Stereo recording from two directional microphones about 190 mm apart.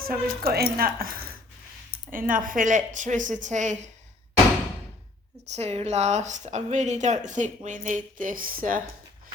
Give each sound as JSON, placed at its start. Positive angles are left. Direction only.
{"t": 0.1, "sound": "a woman's voice", "side_deg": -55}
{"t": 5.5, "sound": "a woman's voice", "side_deg": -35}